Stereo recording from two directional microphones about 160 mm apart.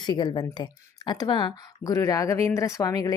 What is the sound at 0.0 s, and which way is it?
A woman's voice, 25° left (ahead or behind).